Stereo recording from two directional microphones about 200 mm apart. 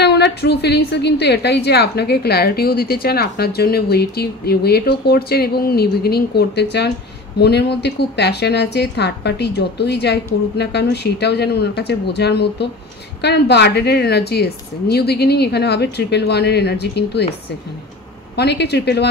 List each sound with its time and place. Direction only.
0.0 s a woman's voice: 55° left (ahead or behind)
18.3 s a woman's voice: 55° left (ahead or behind)